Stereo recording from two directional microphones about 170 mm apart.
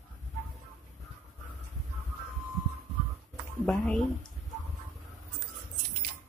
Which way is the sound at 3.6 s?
5° left (ahead or behind).